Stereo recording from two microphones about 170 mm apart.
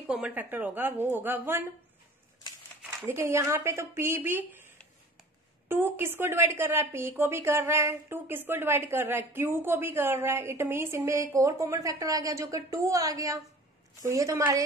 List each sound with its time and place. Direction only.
0.0 s speech: 5° right (ahead or behind)
2.8 s speech: 10° right (ahead or behind)
5.7 s a woman's voice: 10° right (ahead or behind)